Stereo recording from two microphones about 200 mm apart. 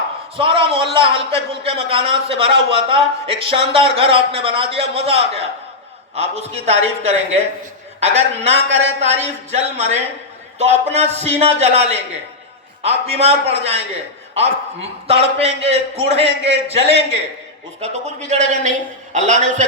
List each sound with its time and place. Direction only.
0.3 s a man's voice: 30° right (ahead or behind)